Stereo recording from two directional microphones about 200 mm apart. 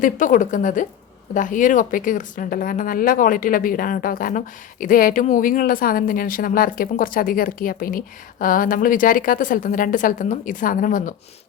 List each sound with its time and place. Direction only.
0.0 s a woman's voice: 40° left (ahead or behind)